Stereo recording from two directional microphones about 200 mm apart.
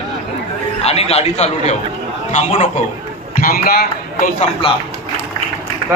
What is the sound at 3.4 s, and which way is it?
A man's voice, 45° left (ahead or behind).